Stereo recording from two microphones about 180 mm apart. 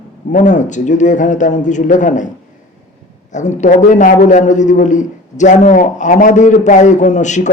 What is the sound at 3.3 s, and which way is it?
A man's voice, 40° left (ahead or behind).